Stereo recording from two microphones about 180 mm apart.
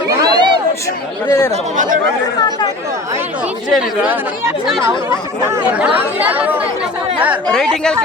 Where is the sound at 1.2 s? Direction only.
20° left (ahead or behind).